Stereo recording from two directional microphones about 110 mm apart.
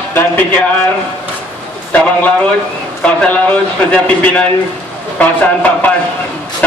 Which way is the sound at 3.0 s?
10° left (ahead or behind).